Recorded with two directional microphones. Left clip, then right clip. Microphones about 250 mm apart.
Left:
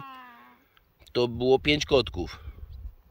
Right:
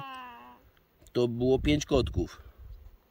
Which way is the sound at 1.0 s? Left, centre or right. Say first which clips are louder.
Left 2 dB; centre.